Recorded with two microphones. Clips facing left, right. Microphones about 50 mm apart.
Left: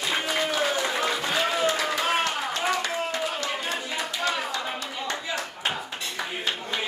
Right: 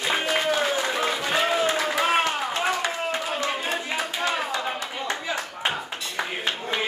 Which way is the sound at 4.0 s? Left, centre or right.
Centre.